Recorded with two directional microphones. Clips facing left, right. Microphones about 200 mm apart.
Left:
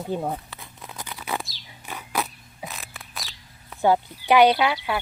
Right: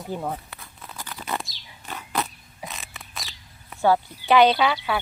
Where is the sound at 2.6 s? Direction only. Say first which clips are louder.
Even; centre (ahead or behind).